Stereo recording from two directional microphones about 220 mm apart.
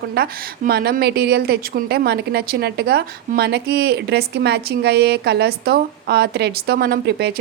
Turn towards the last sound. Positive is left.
turn(degrees=-45)  # may be behind; listen again after turning